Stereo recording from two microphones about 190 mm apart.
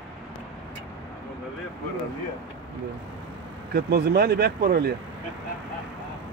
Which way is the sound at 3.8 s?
55° right (ahead or behind).